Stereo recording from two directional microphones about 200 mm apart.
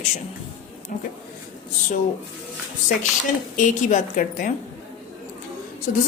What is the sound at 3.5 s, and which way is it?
Speech, 40° left (ahead or behind).